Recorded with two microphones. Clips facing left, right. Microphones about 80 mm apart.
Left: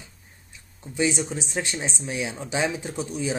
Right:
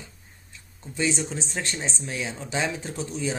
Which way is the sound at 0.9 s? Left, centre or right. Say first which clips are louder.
Left 2 dB; centre.